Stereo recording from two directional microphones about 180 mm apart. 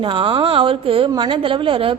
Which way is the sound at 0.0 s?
30° right (ahead or behind).